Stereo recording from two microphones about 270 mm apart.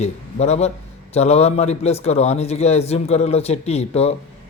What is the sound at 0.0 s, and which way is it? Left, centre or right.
A man's voice, left.